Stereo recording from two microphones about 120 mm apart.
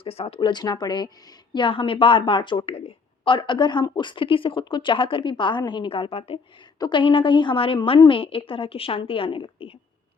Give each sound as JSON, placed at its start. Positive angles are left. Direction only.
{"t": 0.0, "sound": "speech", "side_deg": 55}
{"t": 0.3, "sound": "a woman's voice", "side_deg": 35}
{"t": 6.7, "sound": "a woman's voice", "side_deg": 40}